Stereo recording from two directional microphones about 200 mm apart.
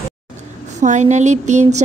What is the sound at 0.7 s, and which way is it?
Speech, 35° right (ahead or behind).